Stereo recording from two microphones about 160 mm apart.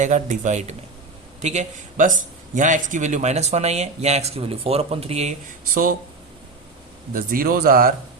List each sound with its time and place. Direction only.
0.0 s a man's voice: 50° right (ahead or behind)
7.1 s speech: 60° right (ahead or behind)